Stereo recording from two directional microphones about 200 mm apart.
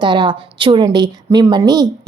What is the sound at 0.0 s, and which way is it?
Speech, 25° right (ahead or behind).